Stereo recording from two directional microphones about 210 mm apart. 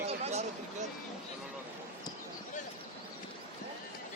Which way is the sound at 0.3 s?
30° right (ahead or behind).